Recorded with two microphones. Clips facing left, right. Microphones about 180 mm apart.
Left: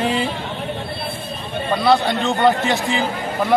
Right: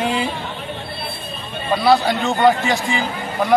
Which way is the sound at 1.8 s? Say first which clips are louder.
Right 1 dB; centre (ahead or behind).